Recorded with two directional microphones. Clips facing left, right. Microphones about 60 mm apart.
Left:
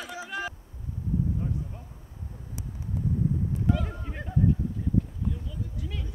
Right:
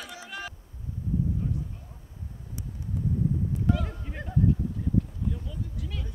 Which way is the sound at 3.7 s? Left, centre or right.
Centre.